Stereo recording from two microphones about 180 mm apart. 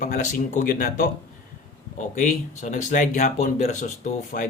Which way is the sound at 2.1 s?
45° left (ahead or behind).